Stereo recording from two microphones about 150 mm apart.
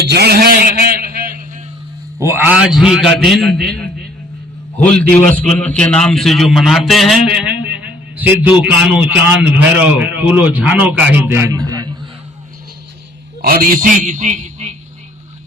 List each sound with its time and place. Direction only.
0.0 s a sound: 90° right
2.1 s a man's voice: 15° right (ahead or behind); by 3.8 s 5° left (ahead or behind)
4.9 s a man's voice: 5° left (ahead or behind); by 11.9 s 25° right (ahead or behind)
13.4 s a man's voice: 80° right; by 14.8 s 50° right (ahead or behind)